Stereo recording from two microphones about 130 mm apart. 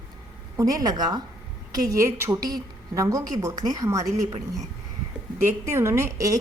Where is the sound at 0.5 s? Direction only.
25° right (ahead or behind).